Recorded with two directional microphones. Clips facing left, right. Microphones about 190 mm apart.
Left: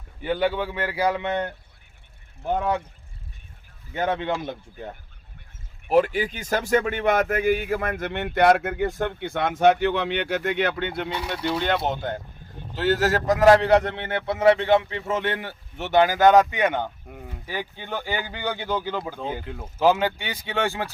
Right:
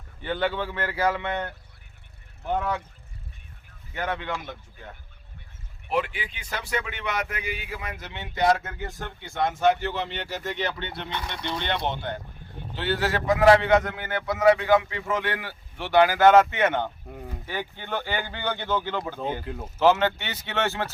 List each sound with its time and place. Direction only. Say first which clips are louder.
0.2 s a man's voice: left 3 dB; 10° left (ahead or behind)
3.9 s a man's voice: left 5 dB; 20° left (ahead or behind)
5.9 s speech: left 8 dB; 40° left (ahead or behind)
11.1 s speech: left 5 dB; 10° left (ahead or behind)
12.7 s a man's voice: left 5 dB; 45° left (ahead or behind); by 19.2 s 10° left (ahead or behind)
19.5 s speech: right 1 dB; centre (ahead or behind)
19.8 s speech: even; 15° left (ahead or behind)